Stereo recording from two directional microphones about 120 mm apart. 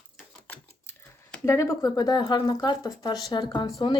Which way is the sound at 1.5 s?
25° left (ahead or behind).